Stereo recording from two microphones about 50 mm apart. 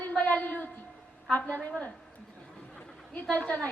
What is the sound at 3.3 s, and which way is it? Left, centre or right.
Speech, left.